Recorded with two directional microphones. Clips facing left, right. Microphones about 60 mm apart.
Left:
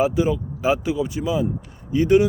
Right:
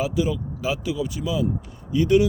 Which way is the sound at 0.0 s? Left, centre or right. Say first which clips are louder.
Left 4 dB; left.